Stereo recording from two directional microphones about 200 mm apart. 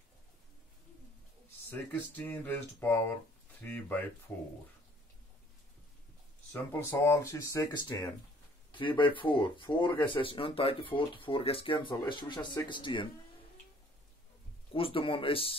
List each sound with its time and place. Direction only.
1.7 s speech: 10° left (ahead or behind)
6.5 s speech: 15° left (ahead or behind)
14.7 s speech: 25° left (ahead or behind)